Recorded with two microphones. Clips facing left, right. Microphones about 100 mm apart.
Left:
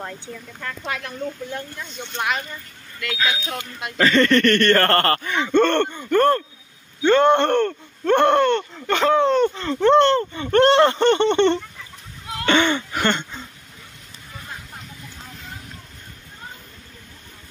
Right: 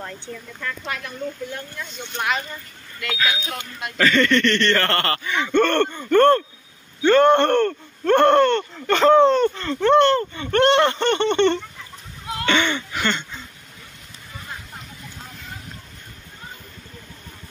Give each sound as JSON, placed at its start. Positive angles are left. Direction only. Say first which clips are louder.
{"t": 2.1, "sound": "speech", "louder": "even", "side_deg": 5}
{"t": 3.2, "sound": "speech", "louder": "even", "side_deg": 20}
{"t": 4.0, "sound": "speech", "louder": "left 2 dB", "side_deg": 35}
{"t": 5.4, "sound": "speech", "louder": "even", "side_deg": 25}
{"t": 7.0, "sound": "speech", "louder": "right 1 dB", "side_deg": 20}
{"t": 9.8, "sound": "speech", "louder": "left 1 dB", "side_deg": 30}
{"t": 12.4, "sound": "a sound", "louder": "left 3 dB", "side_deg": 35}